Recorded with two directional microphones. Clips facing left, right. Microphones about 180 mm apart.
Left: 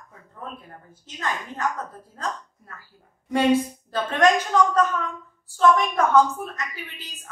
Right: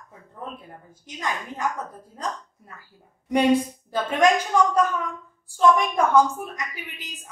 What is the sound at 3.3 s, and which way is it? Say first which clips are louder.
A woman's voice: even; 15° right (ahead or behind).